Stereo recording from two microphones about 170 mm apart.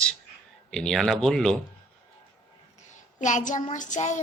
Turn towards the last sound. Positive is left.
turn(degrees=45)  # may be behind; listen again after turning